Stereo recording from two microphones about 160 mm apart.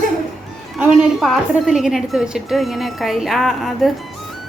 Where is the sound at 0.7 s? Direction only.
5° right (ahead or behind).